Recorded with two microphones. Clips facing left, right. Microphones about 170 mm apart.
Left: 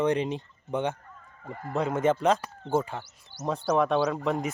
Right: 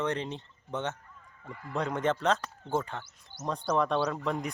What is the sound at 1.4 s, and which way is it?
Speech, 45° left (ahead or behind).